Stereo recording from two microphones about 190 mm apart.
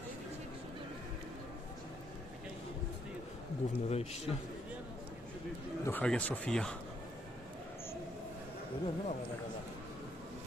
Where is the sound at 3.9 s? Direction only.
35° left (ahead or behind).